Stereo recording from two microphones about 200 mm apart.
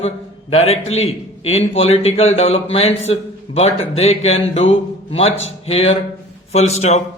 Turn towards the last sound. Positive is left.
turn(degrees=30)  # may be behind; listen again after turning